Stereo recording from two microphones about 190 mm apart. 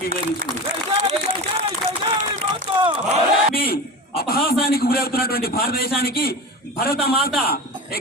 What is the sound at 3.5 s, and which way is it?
A man's voice, 50° left (ahead or behind).